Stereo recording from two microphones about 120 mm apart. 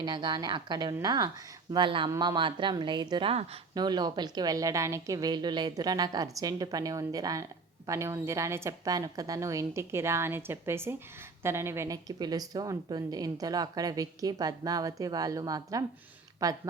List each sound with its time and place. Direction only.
0.0 s a woman's voice: 40° right (ahead or behind)